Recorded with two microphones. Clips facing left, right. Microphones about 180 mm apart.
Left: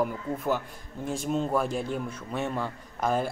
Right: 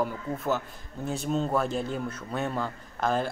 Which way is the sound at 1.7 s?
5° left (ahead or behind).